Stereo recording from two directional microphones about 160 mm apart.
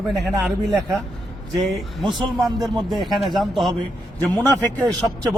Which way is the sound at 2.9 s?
Centre (ahead or behind).